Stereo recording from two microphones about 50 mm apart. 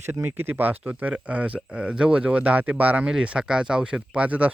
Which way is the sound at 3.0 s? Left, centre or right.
Centre.